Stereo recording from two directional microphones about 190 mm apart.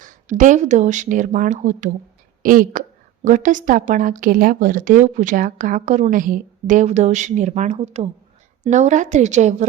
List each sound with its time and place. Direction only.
0.0 s a woman's voice: 40° right (ahead or behind)